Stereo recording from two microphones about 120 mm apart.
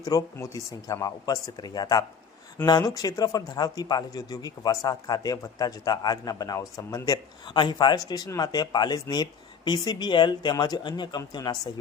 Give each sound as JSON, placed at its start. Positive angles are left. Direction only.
{"t": 0.0, "sound": "a man's voice", "side_deg": 30}